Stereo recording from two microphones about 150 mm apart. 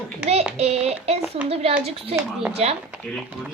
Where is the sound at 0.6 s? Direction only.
45° right (ahead or behind).